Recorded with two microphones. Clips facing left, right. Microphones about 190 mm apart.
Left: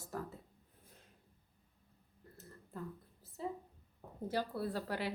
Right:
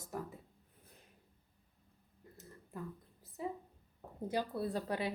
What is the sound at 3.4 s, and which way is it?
Speech, 15° right (ahead or behind).